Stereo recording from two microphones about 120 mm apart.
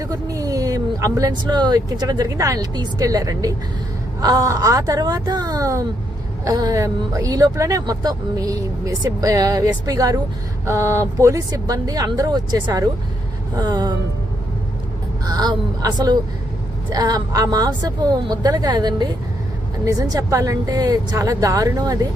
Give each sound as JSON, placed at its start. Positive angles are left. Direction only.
{"t": 0.0, "sound": "speech", "side_deg": -30}
{"t": 15.3, "sound": "speech", "side_deg": -35}